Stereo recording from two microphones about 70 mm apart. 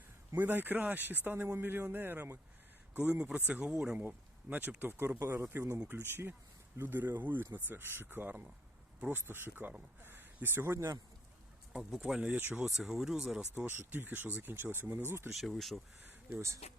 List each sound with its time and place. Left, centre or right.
0.3 s speech: right
2.9 s a man's voice: centre
3.9 s speech: right
11.7 s speech: centre
12.5 s speech: centre
13.7 s speech: right
15.3 s speech: centre
16.0 s a sound: right